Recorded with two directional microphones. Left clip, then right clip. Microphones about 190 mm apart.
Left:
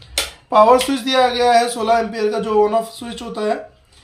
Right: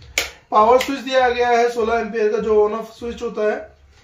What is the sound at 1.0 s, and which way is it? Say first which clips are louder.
A man's voice: left 2 dB; 45° left (ahead or behind).